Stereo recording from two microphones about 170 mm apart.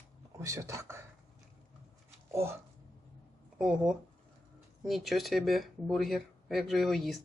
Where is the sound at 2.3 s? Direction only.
15° right (ahead or behind).